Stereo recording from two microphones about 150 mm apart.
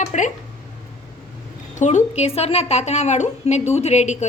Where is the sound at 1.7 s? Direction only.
50° left (ahead or behind).